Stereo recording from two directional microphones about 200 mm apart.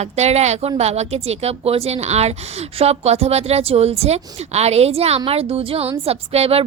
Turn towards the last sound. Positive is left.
turn(degrees=-30)  # may be behind; listen again after turning